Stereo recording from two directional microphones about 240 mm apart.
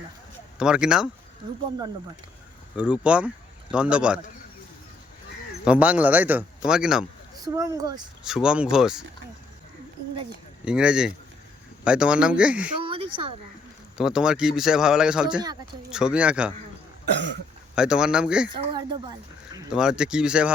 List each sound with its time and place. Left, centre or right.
0.6 s a man's voice: centre
2.7 s speech: centre
5.6 s a man's voice: centre
7.4 s speech: centre
8.2 s a man's voice: centre
10.7 s a man's voice: centre
14.0 s a man's voice: centre
17.1 s cough: right
17.7 s a man's voice: centre
18.5 s speech: centre
19.7 s a man's voice: centre